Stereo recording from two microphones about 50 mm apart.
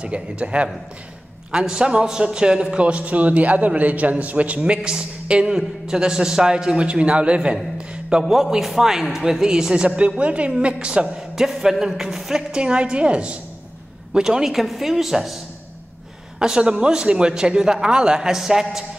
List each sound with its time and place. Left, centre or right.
0.0 s a man's voice: right
7.7 s a sound: right
8.2 s a man's voice: centre
11.1 s a man's voice: centre
16.3 s a man's voice: centre